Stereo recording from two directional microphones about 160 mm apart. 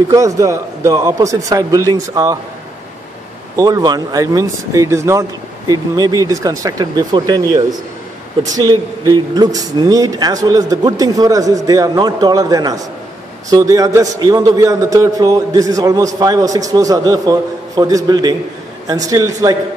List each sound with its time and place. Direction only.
0.1 s speech: 20° right (ahead or behind)
3.5 s speech: 20° right (ahead or behind)
8.5 s speech: 25° right (ahead or behind)